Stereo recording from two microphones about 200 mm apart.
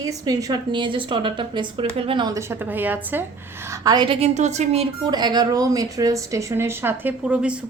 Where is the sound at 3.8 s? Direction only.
20° right (ahead or behind).